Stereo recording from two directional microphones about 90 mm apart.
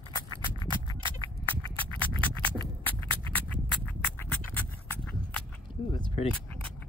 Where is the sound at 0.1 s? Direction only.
65° right (ahead or behind).